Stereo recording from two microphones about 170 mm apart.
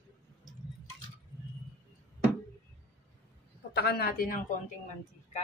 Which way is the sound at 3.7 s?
70° left (ahead or behind).